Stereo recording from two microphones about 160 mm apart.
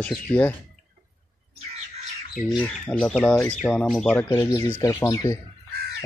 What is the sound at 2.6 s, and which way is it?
Speech, 5° left (ahead or behind).